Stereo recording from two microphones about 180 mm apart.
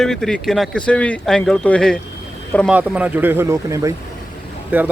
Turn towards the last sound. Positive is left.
turn(degrees=-10)  # may be behind; listen again after turning